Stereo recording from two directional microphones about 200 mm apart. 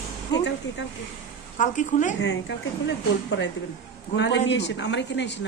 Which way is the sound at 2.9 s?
65° left (ahead or behind).